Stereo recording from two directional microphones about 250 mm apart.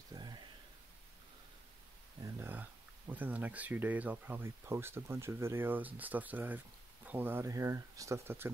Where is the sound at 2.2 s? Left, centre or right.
Centre.